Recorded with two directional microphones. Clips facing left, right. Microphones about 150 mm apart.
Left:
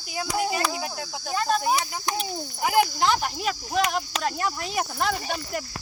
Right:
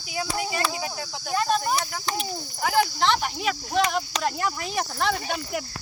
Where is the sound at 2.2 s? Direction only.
5° left (ahead or behind).